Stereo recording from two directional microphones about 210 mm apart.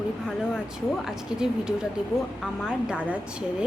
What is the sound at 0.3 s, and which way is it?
A woman's voice, 5° right (ahead or behind).